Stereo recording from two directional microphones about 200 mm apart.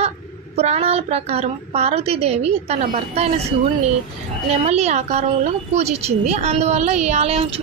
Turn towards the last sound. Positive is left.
turn(degrees=-30)  # may be behind; listen again after turning